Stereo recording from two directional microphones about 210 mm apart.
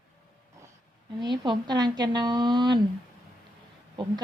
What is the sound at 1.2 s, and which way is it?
Speech, 20° right (ahead or behind).